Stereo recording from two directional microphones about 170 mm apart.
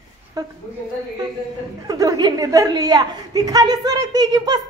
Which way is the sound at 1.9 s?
20° right (ahead or behind).